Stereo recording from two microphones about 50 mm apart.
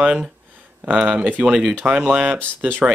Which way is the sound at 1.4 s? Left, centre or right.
Centre.